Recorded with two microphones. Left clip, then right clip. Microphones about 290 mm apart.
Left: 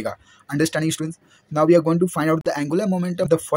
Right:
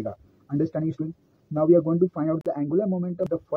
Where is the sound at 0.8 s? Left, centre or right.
Left.